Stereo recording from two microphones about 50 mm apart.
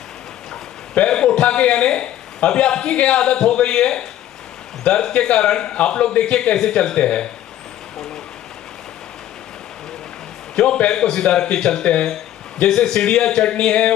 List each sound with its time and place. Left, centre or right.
0.9 s a man's voice: left
10.5 s a man's voice: centre